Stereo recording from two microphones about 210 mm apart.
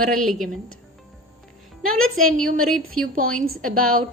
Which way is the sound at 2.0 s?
80° right.